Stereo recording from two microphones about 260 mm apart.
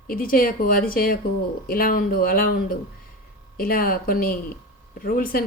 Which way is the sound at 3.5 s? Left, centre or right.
Left.